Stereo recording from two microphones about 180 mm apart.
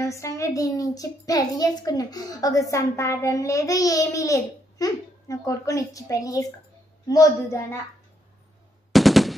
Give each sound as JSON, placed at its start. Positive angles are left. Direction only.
{"t": 0.0, "sound": "a child's voice", "side_deg": 15}
{"t": 8.9, "sound": "machine gun", "side_deg": 0}